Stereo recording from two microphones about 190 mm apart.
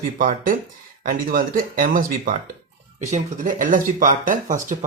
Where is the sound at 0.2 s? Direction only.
45° right (ahead or behind).